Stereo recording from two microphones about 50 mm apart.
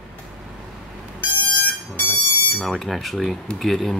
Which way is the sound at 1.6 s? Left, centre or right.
Left.